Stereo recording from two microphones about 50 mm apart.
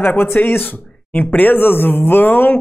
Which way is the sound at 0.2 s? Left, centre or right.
Left.